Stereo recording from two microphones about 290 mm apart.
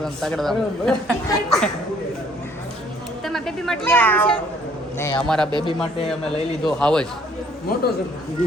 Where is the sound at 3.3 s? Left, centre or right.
Centre.